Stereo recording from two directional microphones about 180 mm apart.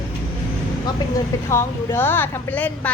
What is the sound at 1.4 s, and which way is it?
A woman's voice, 15° left (ahead or behind).